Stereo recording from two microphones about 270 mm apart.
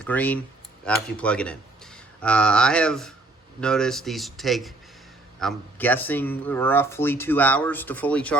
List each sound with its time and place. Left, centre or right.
0.0 s speech: centre